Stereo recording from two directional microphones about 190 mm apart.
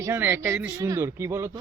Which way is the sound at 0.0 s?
10° right (ahead or behind).